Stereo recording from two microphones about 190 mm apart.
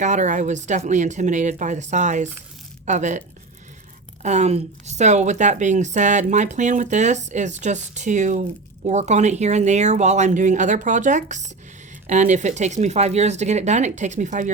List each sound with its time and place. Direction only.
0.0 s a woman's voice: 40° right (ahead or behind)